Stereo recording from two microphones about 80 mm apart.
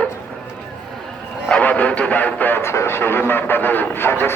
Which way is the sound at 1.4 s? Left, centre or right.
Centre.